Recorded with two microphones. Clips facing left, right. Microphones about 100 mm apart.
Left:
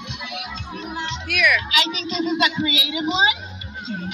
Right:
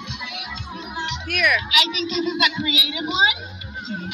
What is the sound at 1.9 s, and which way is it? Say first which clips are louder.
Speech: even; 25° left (ahead or behind).